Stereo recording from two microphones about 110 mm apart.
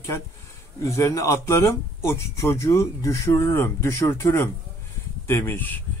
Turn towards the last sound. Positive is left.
turn(degrees=15)  # may be behind; listen again after turning